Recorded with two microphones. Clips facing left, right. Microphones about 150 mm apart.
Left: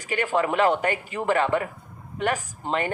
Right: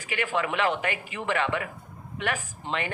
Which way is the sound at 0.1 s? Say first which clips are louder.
Left 5 dB; 40° left (ahead or behind).